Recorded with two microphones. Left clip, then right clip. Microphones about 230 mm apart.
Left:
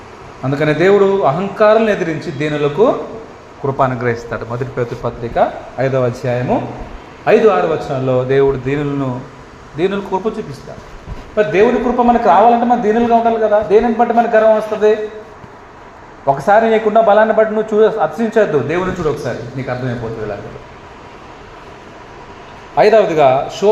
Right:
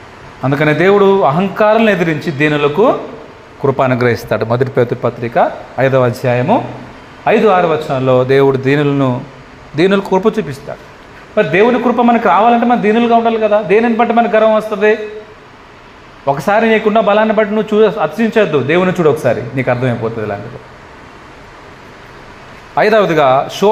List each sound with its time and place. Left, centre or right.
0.4 s a man's voice: right
3.6 s a man's voice: right
11.3 s a man's voice: right
16.2 s a man's voice: right
22.7 s a man's voice: right